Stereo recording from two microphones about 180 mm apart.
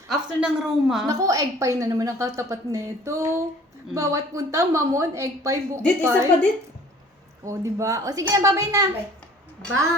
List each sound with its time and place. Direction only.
0.1 s a woman's voice: 5° right (ahead or behind)
1.0 s a woman's voice: 20° right (ahead or behind)
7.4 s a woman's voice: 15° right (ahead or behind)